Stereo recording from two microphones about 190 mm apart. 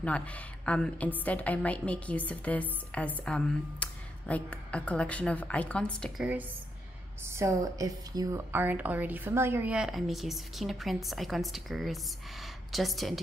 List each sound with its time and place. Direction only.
0.0 s a woman's voice: 5° left (ahead or behind)
7.2 s a woman's voice: 15° right (ahead or behind)